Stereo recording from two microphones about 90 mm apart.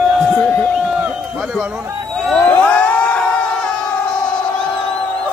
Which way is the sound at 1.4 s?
5° right (ahead or behind).